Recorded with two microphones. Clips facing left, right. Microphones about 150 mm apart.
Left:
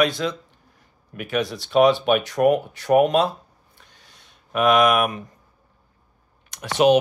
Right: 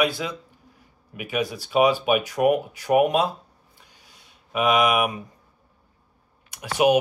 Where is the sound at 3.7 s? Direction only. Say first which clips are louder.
Left 2 dB; 10° right (ahead or behind).